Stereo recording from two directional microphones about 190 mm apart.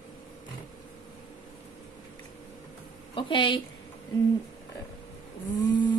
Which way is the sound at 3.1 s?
25° left (ahead or behind).